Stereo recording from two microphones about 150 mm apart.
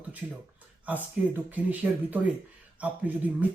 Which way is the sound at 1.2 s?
5° right (ahead or behind).